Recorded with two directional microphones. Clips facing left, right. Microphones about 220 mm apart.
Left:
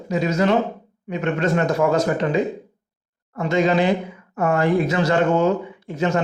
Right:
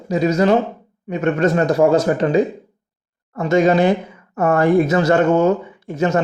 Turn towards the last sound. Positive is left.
turn(degrees=-45)  # may be behind; listen again after turning